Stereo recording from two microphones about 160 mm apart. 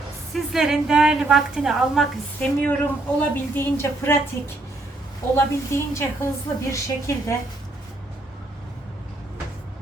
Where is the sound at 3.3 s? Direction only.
15° left (ahead or behind).